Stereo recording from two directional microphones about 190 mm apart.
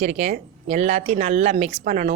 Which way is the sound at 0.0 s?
40° right (ahead or behind).